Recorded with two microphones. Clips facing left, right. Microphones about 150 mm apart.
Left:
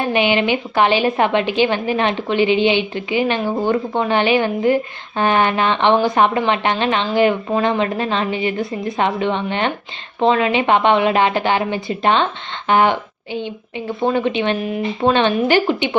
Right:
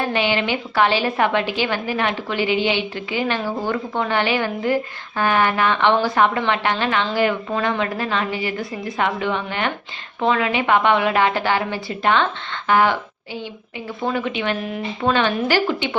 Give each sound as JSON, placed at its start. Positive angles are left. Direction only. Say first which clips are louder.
{"t": 0.0, "sound": "a woman's voice", "louder": "left 4 dB", "side_deg": 15}